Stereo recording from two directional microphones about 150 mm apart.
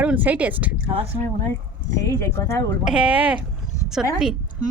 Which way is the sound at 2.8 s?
5° right (ahead or behind).